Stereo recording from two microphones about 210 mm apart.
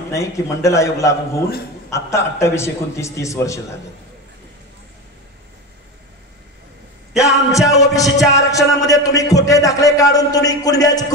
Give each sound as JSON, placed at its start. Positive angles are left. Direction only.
{"t": 0.1, "sound": "a man's voice", "side_deg": 15}
{"t": 7.2, "sound": "a man's voice", "side_deg": 15}